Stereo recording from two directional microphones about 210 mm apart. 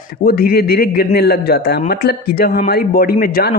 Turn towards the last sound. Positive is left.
turn(degrees=45)  # may be behind; listen again after turning